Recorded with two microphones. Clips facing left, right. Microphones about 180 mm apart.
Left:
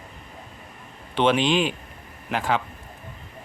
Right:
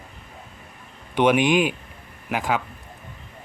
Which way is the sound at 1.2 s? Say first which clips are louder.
Right 2 dB; 10° right (ahead or behind).